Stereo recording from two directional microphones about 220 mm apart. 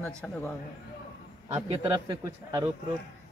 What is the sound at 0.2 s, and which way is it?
Speech, 5° left (ahead or behind).